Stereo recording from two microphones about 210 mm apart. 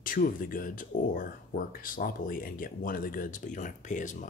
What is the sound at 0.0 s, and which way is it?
Speech, 40° left (ahead or behind).